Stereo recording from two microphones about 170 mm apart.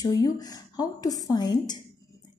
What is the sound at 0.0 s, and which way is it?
A woman's voice, 20° left (ahead or behind).